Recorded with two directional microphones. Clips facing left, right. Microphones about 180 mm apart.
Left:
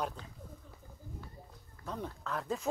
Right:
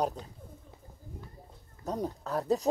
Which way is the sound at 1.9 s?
40° right (ahead or behind).